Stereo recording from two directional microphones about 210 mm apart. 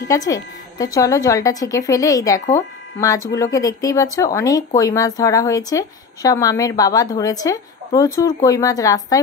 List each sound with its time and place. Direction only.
0.1 s speech: 15° left (ahead or behind)